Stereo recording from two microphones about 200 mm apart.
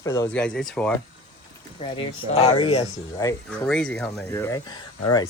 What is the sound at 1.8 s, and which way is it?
Speech, 25° left (ahead or behind).